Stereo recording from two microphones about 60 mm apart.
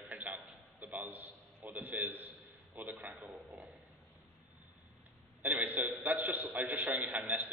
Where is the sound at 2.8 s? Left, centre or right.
Right.